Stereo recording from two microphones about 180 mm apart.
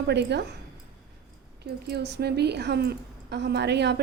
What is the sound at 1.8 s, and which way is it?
A woman's voice, 65° right (ahead or behind).